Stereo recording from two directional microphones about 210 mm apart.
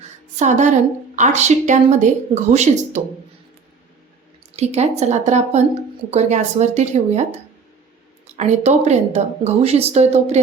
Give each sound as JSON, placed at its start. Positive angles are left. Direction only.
{"t": 0.3, "sound": "a woman's voice", "side_deg": -35}
{"t": 4.5, "sound": "a woman's voice", "side_deg": -30}
{"t": 8.4, "sound": "a woman's voice", "side_deg": -30}